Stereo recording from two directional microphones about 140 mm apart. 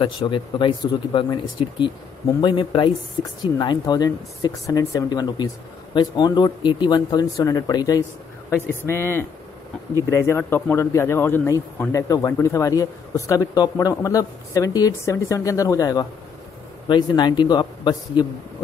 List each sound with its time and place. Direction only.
0.0 s speech: 35° left (ahead or behind)
8.5 s speech: 15° left (ahead or behind); by 18.2 s 35° left (ahead or behind)